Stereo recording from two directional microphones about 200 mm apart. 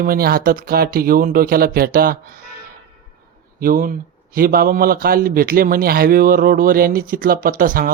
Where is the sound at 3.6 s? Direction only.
45° right (ahead or behind).